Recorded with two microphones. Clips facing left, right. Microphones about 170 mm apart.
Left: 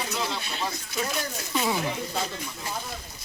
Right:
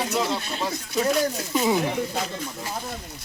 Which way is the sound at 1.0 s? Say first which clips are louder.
Right 8 dB; 40° right (ahead or behind).